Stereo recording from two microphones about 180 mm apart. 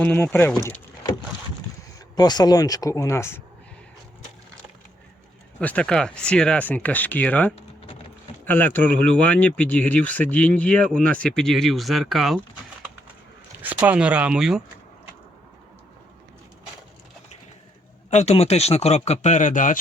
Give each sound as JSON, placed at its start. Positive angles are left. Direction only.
{"t": 0.0, "sound": "speech", "side_deg": 10}
{"t": 2.1, "sound": "speech", "side_deg": 25}
{"t": 5.5, "sound": "speech", "side_deg": 5}
{"t": 13.6, "sound": "speech", "side_deg": -10}
{"t": 18.1, "sound": "speech", "side_deg": 40}